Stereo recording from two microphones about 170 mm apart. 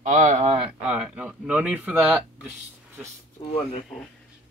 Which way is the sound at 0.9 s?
5° right (ahead or behind).